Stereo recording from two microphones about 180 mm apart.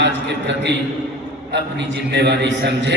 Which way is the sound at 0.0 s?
75° right (ahead or behind).